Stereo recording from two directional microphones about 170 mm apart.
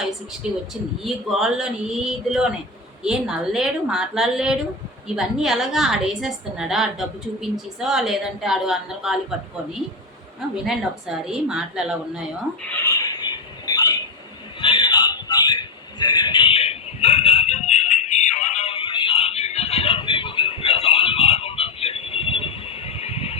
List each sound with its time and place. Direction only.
0.4 s a woman's voice: 5° right (ahead or behind)
10.6 s a woman's voice: centre (ahead or behind)
13.2 s a sound: 25° left (ahead or behind)